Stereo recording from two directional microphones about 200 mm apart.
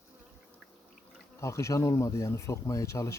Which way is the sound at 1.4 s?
15° left (ahead or behind).